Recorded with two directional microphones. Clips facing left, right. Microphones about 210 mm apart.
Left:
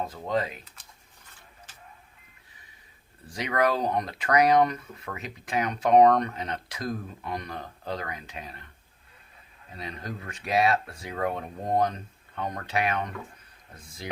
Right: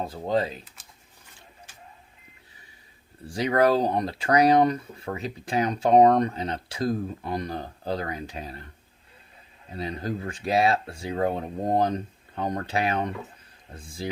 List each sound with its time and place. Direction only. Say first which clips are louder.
0.0 s speech: right 3 dB; 30° right (ahead or behind)
3.2 s speech: right 5 dB; 30° right (ahead or behind)
9.6 s speech: right 7 dB; 30° right (ahead or behind)